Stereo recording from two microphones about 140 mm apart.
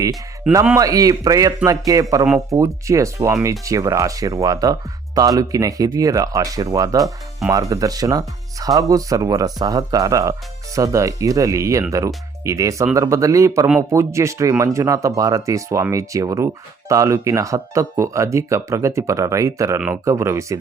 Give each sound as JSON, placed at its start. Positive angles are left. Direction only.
{"t": 0.8, "sound": "speech", "side_deg": -25}